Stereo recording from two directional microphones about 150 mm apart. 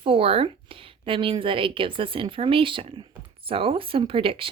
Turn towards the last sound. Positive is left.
turn(degrees=-35)  # may be behind; listen again after turning